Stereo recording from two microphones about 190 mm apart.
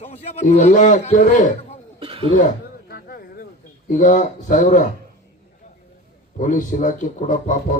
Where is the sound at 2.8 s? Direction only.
55° left (ahead or behind).